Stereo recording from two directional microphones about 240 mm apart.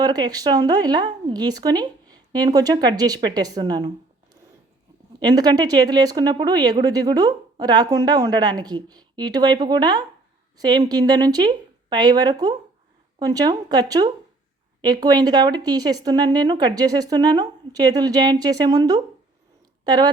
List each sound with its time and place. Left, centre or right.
0.0 s speech: centre
5.2 s speech: centre